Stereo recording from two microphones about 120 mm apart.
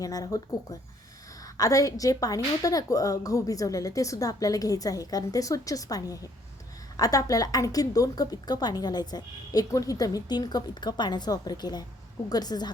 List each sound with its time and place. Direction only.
0.0 s a woman's voice: 30° left (ahead or behind)